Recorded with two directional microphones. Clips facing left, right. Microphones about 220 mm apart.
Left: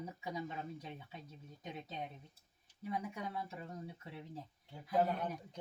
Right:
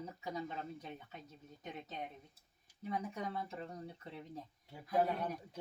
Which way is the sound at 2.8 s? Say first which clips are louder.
Right 1 dB; 10° left (ahead or behind).